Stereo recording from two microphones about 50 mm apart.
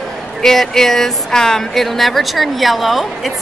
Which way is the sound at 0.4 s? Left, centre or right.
Centre.